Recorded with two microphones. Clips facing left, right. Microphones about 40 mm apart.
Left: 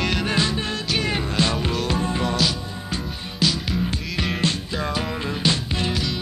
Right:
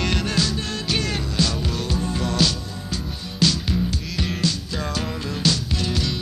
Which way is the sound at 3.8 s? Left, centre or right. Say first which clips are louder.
Left 1 dB; left.